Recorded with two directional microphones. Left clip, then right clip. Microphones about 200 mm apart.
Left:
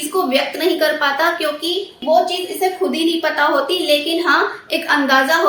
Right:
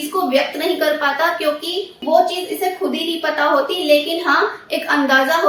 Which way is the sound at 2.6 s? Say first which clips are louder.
Left 5 dB; 30° left (ahead or behind).